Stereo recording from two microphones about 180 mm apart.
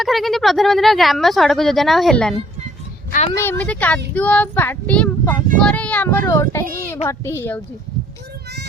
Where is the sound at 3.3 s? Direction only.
10° left (ahead or behind).